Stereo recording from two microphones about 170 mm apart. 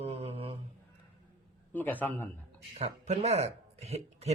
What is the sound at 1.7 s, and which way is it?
Speech, 10° left (ahead or behind).